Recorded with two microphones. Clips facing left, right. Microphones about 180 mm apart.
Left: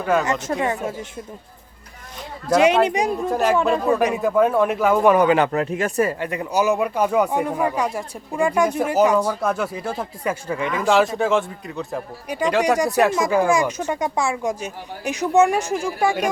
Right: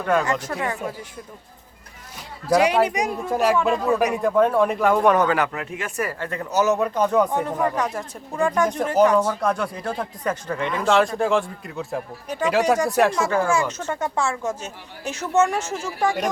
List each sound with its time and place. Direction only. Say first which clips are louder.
0.0 s a man's voice: left 1 dB; 5° left (ahead or behind)
0.3 s speech: left 3 dB; 20° left (ahead or behind)
2.6 s speech: left 3 dB; 25° left (ahead or behind)
3.2 s a man's voice: even; centre (ahead or behind)
5.5 s speech: left 8 dB; 40° left (ahead or behind)
6.0 s a man's voice: left 3 dB; 20° left (ahead or behind); by 12.0 s centre (ahead or behind)
12.3 s a man's voice: left 1 dB; 10° left (ahead or behind)
13.2 s speech: left 3 dB; 15° left (ahead or behind)